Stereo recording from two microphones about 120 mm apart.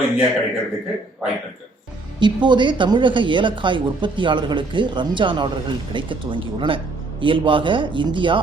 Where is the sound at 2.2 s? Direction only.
40° right (ahead or behind).